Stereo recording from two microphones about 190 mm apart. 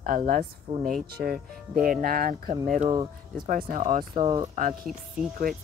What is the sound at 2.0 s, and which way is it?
Speech, 50° right (ahead or behind).